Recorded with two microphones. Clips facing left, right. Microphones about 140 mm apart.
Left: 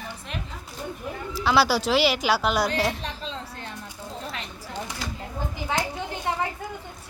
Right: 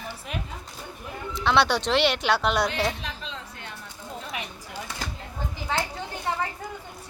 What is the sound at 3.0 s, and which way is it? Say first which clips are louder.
Chatter: left 3 dB; 35° left (ahead or behind).